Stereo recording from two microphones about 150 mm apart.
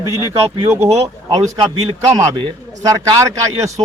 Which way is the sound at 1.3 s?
30° right (ahead or behind).